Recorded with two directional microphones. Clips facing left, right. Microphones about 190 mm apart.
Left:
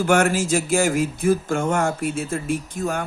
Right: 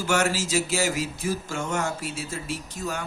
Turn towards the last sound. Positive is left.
turn(degrees=55)  # may be behind; listen again after turning